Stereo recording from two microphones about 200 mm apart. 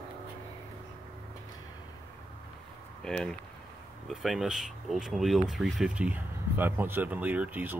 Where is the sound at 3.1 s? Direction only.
Centre (ahead or behind).